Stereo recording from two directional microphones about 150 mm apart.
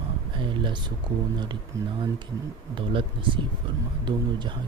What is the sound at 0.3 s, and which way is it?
Speech, 35° right (ahead or behind).